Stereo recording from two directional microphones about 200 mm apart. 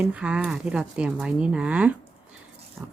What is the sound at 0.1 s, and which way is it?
Speech, 5° right (ahead or behind).